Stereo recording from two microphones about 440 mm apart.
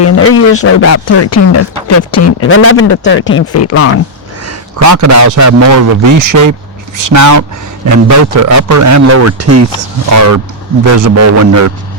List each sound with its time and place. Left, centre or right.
0.0 s a man's voice: left
4.4 s a man's voice: right